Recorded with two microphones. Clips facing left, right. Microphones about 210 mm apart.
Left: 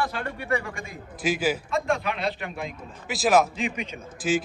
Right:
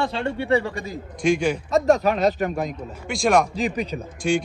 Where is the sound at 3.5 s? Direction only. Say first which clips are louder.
Right 6 dB; 35° right (ahead or behind).